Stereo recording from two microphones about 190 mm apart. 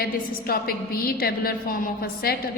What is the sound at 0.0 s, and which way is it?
A woman's voice, 55° left (ahead or behind).